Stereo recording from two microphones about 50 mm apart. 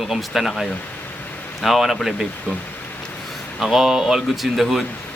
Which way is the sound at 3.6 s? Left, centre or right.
Centre.